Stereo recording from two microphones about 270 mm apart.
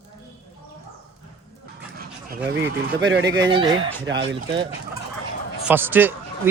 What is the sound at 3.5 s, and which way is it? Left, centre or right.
Speech, centre.